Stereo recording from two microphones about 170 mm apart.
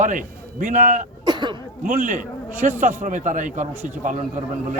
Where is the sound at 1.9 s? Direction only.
50° right (ahead or behind).